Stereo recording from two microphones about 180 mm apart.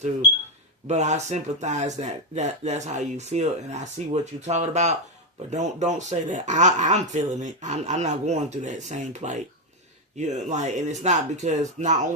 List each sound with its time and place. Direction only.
0.9 s speech: 40° right (ahead or behind)